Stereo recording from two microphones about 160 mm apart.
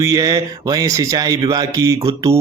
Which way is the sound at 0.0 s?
20° right (ahead or behind).